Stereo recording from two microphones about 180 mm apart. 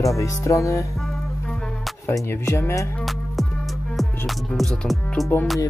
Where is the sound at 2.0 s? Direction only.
15° left (ahead or behind).